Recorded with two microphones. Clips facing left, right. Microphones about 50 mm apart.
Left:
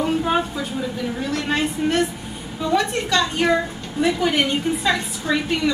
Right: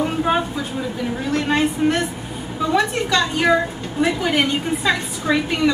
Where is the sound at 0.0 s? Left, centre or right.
Centre.